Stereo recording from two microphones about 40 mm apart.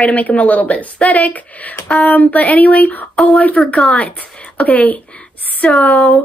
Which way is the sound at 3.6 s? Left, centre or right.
Left.